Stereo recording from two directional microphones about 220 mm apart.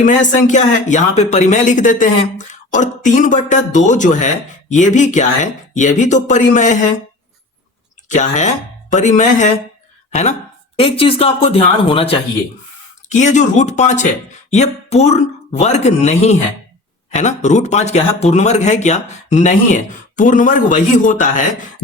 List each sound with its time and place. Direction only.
0.3 s speech: 35° left (ahead or behind)
8.0 s speech: 35° left (ahead or behind)
10.8 s speech: 25° left (ahead or behind)